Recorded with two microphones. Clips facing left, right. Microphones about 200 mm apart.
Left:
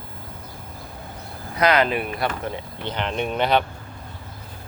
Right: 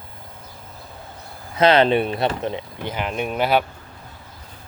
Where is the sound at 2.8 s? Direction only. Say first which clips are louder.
Even; 10° right (ahead or behind).